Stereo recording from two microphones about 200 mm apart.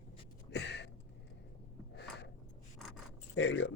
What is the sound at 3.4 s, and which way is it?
Speech, 65° left (ahead or behind).